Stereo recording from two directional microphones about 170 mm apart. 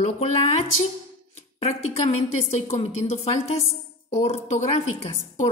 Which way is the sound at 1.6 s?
35° left (ahead or behind).